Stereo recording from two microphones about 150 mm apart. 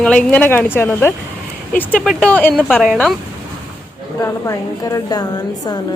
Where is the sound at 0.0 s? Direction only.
10° left (ahead or behind).